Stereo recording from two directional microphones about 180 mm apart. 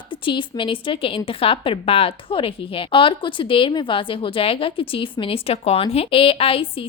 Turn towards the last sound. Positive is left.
turn(degrees=30)  # may be behind; listen again after turning